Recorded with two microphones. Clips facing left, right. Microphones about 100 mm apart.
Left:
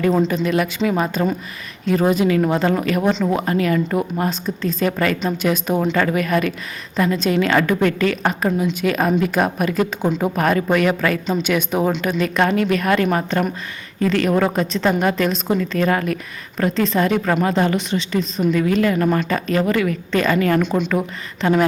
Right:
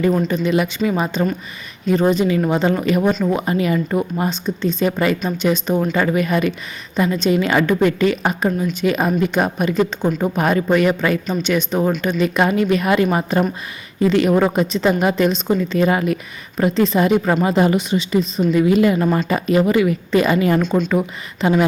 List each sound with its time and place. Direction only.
0.3 s speech: centre (ahead or behind)
4.9 s a woman's voice: 10° right (ahead or behind)
5.4 s a woman's voice: 5° left (ahead or behind)